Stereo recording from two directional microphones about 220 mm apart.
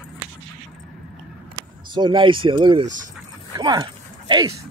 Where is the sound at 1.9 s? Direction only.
20° right (ahead or behind).